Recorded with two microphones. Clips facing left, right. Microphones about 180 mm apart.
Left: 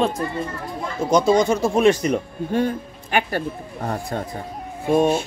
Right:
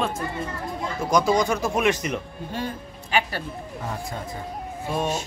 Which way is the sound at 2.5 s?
50° left (ahead or behind).